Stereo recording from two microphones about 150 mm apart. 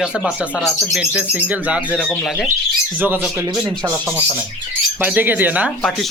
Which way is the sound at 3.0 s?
15° right (ahead or behind).